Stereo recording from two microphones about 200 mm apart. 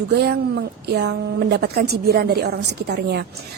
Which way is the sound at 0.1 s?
55° right (ahead or behind).